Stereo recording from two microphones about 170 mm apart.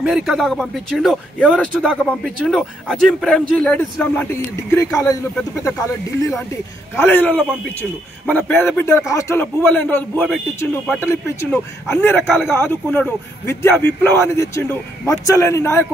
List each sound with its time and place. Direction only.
0.0 s speech: centre (ahead or behind); by 5.2 s 20° left (ahead or behind)
7.0 s a man's voice: 10° left (ahead or behind)